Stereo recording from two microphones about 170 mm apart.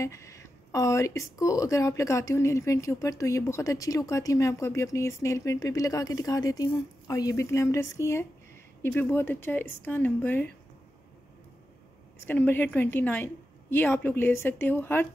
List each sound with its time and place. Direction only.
0.0 s a woman's voice: 15° left (ahead or behind)
12.3 s a woman's voice: 10° left (ahead or behind)